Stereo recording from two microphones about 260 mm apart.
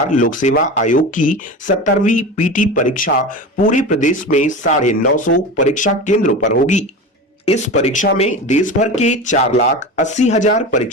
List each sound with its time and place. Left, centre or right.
0.2 s speech: left